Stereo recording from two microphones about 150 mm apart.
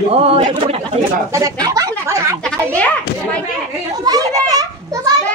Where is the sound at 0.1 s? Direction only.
40° right (ahead or behind).